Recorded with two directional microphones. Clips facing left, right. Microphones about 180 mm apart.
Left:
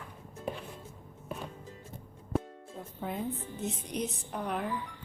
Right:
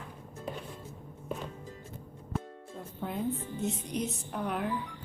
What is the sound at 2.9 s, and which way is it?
Music, centre (ahead or behind).